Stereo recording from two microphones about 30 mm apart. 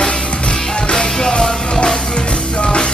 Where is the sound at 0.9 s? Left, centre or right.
Left.